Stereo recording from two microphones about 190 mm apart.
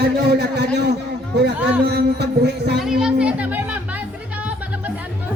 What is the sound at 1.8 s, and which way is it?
A man's voice, 60° right (ahead or behind).